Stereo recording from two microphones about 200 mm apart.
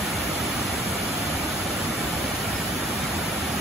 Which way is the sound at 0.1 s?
Centre (ahead or behind).